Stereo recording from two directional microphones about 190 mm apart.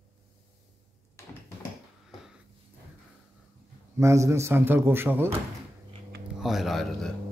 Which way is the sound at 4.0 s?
15° right (ahead or behind).